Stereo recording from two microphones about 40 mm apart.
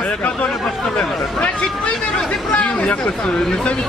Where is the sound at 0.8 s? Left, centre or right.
Centre.